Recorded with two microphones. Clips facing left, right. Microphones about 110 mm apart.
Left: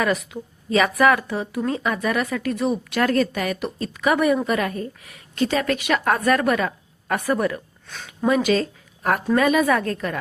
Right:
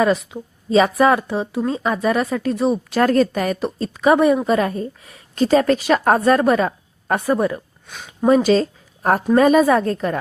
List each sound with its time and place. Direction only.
0.0 s a woman's voice: 30° right (ahead or behind)
7.9 s a sound: 15° right (ahead or behind)
8.3 s a woman's voice: 35° right (ahead or behind)